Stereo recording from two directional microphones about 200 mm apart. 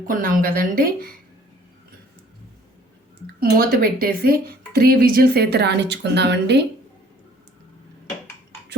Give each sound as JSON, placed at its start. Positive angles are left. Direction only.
{"t": 0.0, "sound": "speech", "side_deg": -40}
{"t": 3.4, "sound": "speech", "side_deg": -50}